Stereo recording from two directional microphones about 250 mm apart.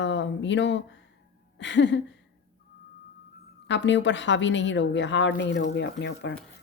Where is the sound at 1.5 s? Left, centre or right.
Left.